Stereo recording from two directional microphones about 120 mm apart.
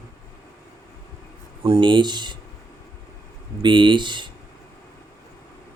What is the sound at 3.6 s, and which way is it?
Speech, 40° right (ahead or behind).